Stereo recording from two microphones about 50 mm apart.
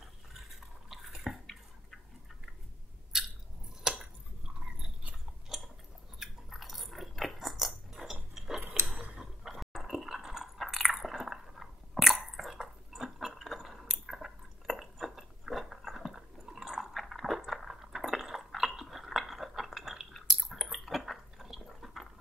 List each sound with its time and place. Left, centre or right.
0.6 s dishes: centre
3.1 s chewing: centre
3.9 s a sound: centre
4.6 s chewing: centre
5.5 s chewing: centre
6.1 s cutlery: centre
9.2 s dog: centre
10.6 s chewing: centre
15.8 s a sound: centre
20.1 s chewing: centre
20.3 s chewing: centre